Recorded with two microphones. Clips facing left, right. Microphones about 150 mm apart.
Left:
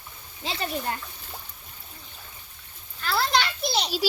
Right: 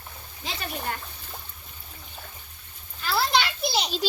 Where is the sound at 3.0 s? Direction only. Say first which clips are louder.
Even; 5° right (ahead or behind).